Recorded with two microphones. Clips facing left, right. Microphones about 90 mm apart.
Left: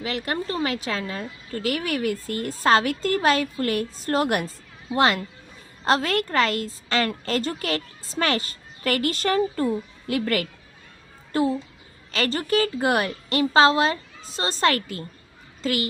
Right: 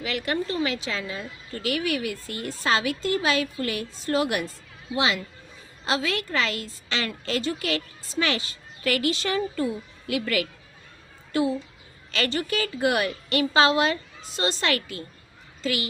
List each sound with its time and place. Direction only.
0.0 s a woman's voice: 35° left (ahead or behind)
12.1 s a woman's voice: 35° left (ahead or behind)